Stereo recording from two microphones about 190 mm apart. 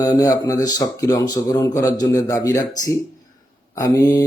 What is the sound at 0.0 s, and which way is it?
Speech, 20° left (ahead or behind).